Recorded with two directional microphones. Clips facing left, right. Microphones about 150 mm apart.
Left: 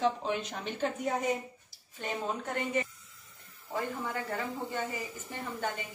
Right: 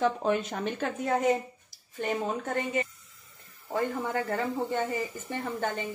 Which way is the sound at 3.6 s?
50° right (ahead or behind).